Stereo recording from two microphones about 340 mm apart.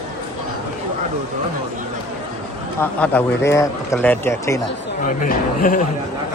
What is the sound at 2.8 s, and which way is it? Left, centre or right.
Speech, centre.